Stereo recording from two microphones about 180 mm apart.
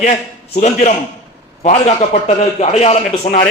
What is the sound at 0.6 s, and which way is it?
A man's voice, 40° left (ahead or behind).